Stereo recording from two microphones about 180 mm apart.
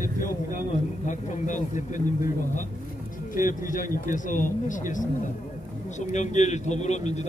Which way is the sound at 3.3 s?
50° left (ahead or behind).